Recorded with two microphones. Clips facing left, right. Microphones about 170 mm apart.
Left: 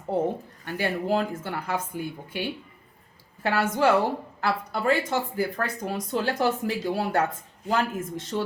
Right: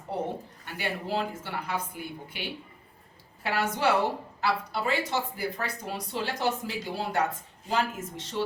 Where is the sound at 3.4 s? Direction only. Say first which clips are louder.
Left 4 dB; 45° left (ahead or behind).